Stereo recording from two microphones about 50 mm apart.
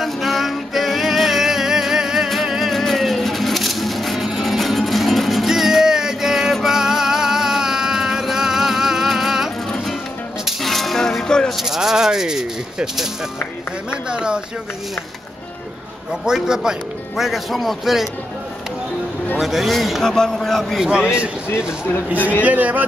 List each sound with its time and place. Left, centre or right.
0.0 s music: centre
11.6 s speech: centre
16.3 s speech: centre
17.2 s a man's voice: centre
19.3 s a man's voice: centre
20.1 s a man's voice: centre
22.4 s speech: right